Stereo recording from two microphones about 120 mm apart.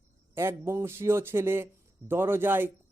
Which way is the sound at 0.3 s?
20° right (ahead or behind).